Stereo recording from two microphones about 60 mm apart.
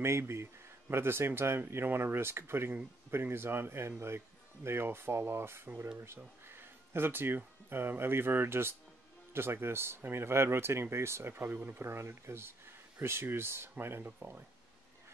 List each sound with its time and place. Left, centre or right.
0.0 s speech: right